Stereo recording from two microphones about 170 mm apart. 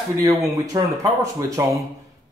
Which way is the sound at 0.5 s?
20° right (ahead or behind).